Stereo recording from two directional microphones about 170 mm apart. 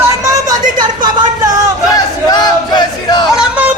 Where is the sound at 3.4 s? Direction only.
10° right (ahead or behind).